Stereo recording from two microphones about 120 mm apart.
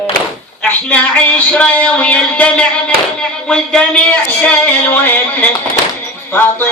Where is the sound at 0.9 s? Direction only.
10° left (ahead or behind).